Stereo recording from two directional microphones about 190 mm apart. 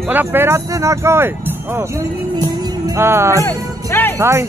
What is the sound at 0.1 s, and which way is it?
Speech, 10° right (ahead or behind).